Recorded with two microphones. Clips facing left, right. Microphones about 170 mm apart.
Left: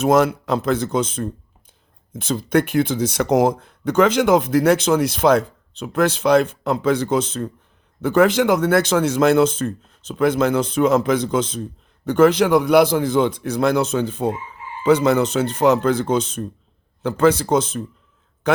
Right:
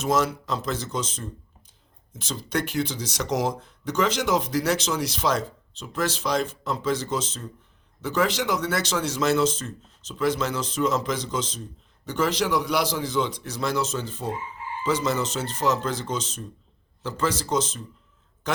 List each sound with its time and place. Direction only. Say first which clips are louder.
0.0 s a man's voice: left 8 dB; 55° left (ahead or behind)